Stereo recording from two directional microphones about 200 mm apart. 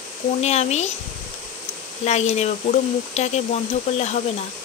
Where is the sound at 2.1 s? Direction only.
35° left (ahead or behind).